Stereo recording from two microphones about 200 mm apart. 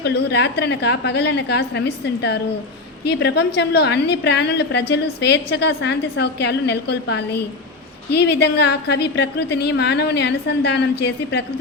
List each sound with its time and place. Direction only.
0.0 s a woman's voice: 60° left (ahead or behind)